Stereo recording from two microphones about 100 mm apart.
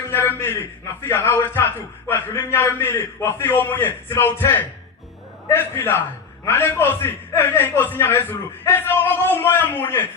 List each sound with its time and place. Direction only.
0.1 s a man's voice: 20° left (ahead or behind)